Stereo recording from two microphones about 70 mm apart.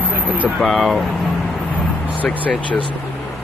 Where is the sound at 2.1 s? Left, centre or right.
Left.